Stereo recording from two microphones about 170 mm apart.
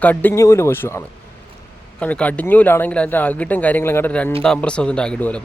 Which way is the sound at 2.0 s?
10° left (ahead or behind).